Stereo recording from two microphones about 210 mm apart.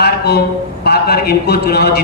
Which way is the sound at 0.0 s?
50° left (ahead or behind).